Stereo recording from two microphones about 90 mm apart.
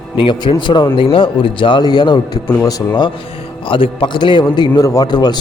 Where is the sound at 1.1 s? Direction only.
70° left (ahead or behind); by 3.0 s 45° left (ahead or behind).